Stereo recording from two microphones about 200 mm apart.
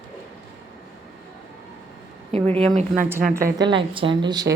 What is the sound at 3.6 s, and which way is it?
Speech, 25° right (ahead or behind).